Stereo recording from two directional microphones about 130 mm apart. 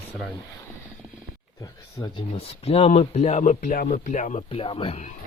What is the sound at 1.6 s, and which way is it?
Speech, 30° left (ahead or behind).